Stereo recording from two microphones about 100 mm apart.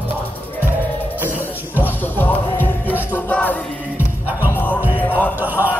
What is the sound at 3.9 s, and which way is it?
Music, 15° right (ahead or behind).